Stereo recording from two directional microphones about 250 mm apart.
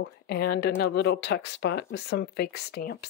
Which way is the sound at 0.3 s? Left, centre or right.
Left.